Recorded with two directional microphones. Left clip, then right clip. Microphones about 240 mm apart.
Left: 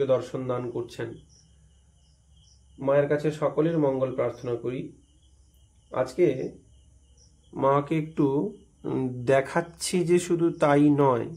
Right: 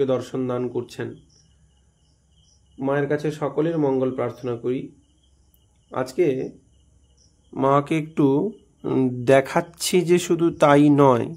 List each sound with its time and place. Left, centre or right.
0.0 s speech: right
2.8 s speech: right
5.9 s speech: right
7.5 s speech: right